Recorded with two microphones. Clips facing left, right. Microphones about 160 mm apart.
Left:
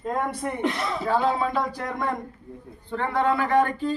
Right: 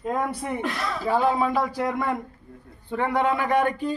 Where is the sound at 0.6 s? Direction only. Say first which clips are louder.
Left 2 dB; 20° left (ahead or behind).